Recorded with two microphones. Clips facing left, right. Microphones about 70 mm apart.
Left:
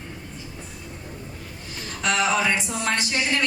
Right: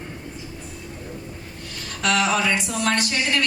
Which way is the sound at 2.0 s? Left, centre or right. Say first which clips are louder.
Right 1 dB; right.